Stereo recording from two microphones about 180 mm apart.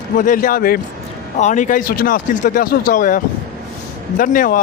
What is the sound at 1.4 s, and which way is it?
Speech, 45° left (ahead or behind).